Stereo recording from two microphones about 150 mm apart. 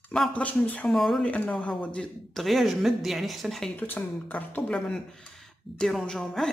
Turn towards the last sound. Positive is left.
turn(degrees=5)  # may be behind; listen again after turning